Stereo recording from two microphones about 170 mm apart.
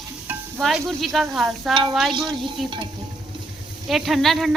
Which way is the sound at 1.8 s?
Centre (ahead or behind).